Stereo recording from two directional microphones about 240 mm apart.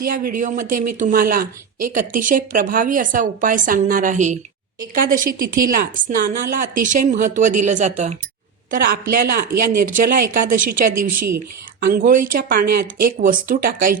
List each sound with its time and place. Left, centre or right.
0.1 s speech: right